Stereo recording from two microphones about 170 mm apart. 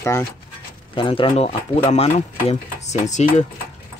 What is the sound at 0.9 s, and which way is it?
Speech, 30° left (ahead or behind).